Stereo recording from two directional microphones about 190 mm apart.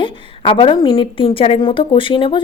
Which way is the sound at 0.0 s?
25° left (ahead or behind).